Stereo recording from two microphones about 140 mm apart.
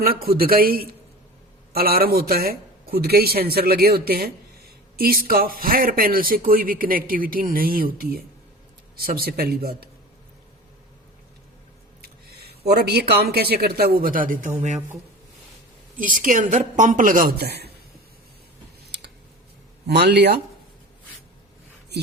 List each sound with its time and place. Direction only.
0.0 s speech: 90° right
12.0 s speech: 90° right
16.0 s a woman's voice: 70° right (ahead or behind)